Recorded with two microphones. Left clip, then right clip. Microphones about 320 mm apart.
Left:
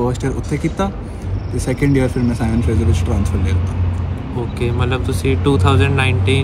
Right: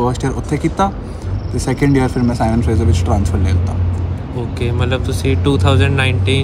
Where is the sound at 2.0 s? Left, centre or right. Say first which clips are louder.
Right 2 dB; centre.